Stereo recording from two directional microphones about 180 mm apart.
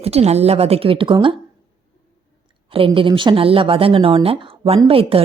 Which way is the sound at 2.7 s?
30° right (ahead or behind).